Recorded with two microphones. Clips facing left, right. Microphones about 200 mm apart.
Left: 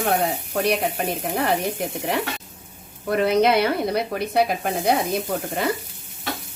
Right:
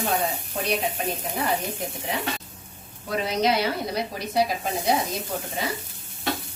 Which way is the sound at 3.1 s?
55° left (ahead or behind).